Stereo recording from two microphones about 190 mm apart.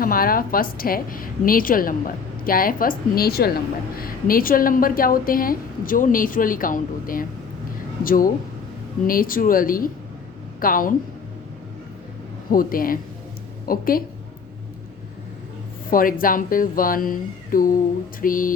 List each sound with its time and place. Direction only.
0.0 s a woman's voice: 50° left (ahead or behind)
12.5 s a woman's voice: 50° left (ahead or behind)
15.9 s a woman's voice: 45° left (ahead or behind)